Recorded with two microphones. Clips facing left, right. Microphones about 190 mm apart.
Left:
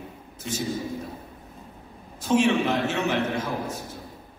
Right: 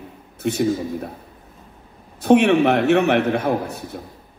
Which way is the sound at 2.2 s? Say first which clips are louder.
Right 7 dB; 65° right (ahead or behind).